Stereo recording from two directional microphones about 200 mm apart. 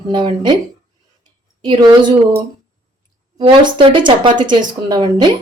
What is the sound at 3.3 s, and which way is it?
Speech, 25° right (ahead or behind).